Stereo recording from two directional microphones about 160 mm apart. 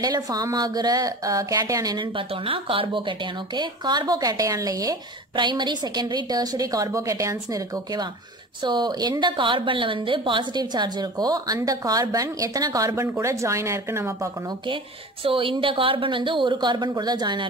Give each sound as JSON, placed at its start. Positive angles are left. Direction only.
{"t": 0.0, "sound": "a woman's voice", "side_deg": -25}
{"t": 15.2, "sound": "a woman's voice", "side_deg": -35}